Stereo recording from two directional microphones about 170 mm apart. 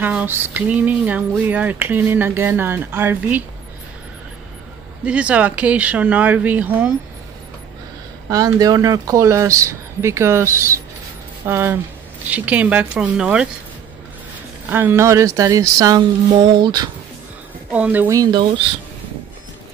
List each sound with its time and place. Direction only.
0.0 s speech: 10° right (ahead or behind)
5.0 s speech: 5° right (ahead or behind)
8.3 s speech: 20° right (ahead or behind)
14.7 s speech: 15° right (ahead or behind)
17.6 s speech: 10° right (ahead or behind)